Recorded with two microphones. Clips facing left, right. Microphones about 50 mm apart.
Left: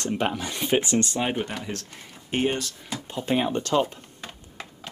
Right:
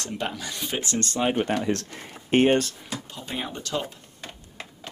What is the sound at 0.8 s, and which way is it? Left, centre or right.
Speech, centre.